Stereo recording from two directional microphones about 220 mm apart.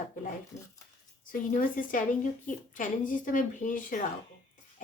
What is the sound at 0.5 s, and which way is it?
Speech, 30° left (ahead or behind).